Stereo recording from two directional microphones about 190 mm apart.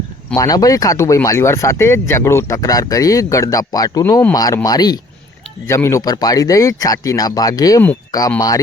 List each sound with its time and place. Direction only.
0.3 s speech: 20° left (ahead or behind)